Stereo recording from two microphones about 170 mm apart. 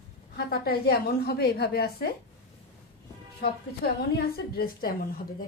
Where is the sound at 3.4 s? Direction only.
65° left (ahead or behind).